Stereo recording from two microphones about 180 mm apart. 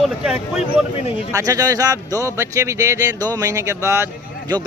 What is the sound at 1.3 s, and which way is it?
A man's voice, 20° right (ahead or behind).